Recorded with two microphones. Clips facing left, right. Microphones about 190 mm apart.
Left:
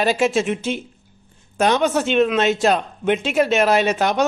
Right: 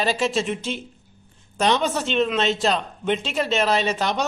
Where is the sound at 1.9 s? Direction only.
50° left (ahead or behind).